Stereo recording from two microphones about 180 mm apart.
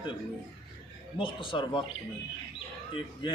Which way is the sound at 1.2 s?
25° left (ahead or behind).